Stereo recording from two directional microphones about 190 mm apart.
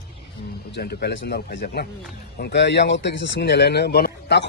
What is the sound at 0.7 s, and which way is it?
A man's voice, 60° left (ahead or behind).